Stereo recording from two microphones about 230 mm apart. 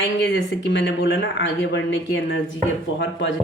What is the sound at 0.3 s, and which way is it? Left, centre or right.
Speech, left.